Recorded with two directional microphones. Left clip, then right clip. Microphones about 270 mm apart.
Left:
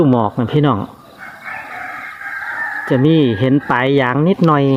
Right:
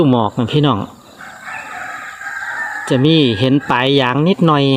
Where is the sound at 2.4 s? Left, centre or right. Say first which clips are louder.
Left 1 dB; left.